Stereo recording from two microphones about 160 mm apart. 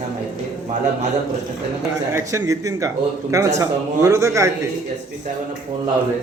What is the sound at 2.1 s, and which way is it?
A man's voice, 20° right (ahead or behind).